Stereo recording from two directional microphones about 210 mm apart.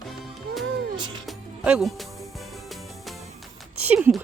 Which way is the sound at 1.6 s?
5° right (ahead or behind).